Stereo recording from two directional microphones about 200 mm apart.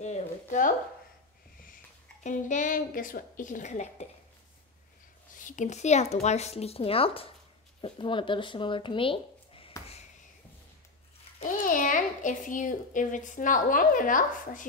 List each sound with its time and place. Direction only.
0.0 s speech: 35° left (ahead or behind)
2.2 s a child's voice: 40° left (ahead or behind)
5.4 s a child's voice: 40° left (ahead or behind)
11.3 s a child's voice: 40° left (ahead or behind)